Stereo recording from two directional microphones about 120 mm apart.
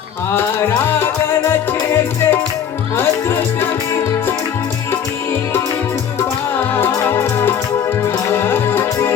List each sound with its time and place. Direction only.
0.9 s music: 20° left (ahead or behind)
6.7 s music: 20° left (ahead or behind)